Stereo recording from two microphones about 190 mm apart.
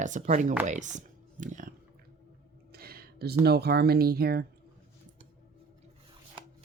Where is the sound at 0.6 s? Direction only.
40° right (ahead or behind).